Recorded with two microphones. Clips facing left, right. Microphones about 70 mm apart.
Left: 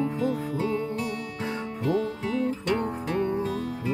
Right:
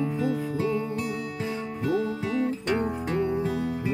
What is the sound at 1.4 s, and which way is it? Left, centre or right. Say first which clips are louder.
Music: left 2 dB; left.